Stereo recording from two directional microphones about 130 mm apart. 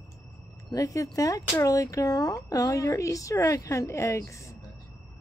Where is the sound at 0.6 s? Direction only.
25° left (ahead or behind).